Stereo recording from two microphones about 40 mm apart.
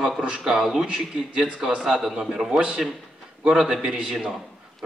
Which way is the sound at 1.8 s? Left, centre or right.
Centre.